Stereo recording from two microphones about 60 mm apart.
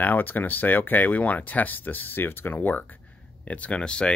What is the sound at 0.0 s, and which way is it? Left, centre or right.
Speech, left.